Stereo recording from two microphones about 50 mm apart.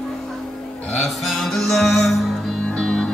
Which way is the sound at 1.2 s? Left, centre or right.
Centre.